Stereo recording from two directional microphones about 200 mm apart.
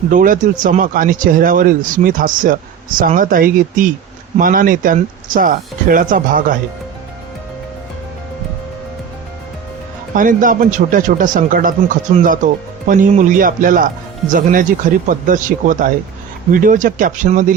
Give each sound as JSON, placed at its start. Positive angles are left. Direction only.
{"t": 0.1, "sound": "speech", "side_deg": -45}
{"t": 10.2, "sound": "speech", "side_deg": -40}